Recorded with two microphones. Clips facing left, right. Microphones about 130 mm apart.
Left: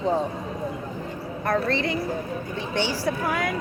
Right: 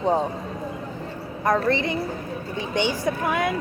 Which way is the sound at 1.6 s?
20° right (ahead or behind).